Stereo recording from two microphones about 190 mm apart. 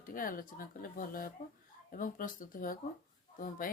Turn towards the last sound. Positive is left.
turn(degrees=45)  # may be behind; listen again after turning